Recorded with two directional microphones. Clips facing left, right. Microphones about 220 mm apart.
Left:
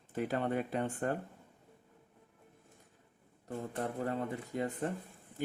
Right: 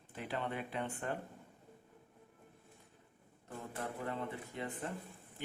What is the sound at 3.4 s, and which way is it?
Speech, 40° left (ahead or behind).